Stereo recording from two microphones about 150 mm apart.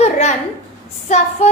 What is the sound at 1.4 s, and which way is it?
Speech, 45° left (ahead or behind).